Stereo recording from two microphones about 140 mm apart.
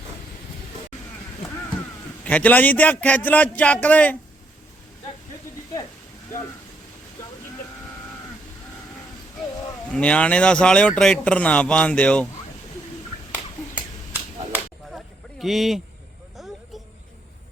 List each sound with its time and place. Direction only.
2.2 s speech: 10° left (ahead or behind)
9.9 s speech: 10° left (ahead or behind)
14.9 s a sound: centre (ahead or behind)